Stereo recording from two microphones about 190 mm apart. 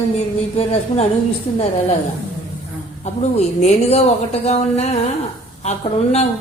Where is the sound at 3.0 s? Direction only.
35° left (ahead or behind).